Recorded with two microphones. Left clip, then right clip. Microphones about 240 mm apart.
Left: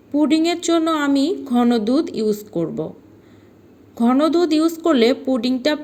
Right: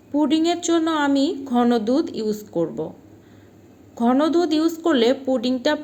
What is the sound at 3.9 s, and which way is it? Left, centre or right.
A woman's voice, left.